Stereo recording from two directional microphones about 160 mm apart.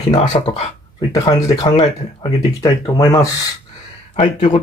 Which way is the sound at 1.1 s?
20° left (ahead or behind).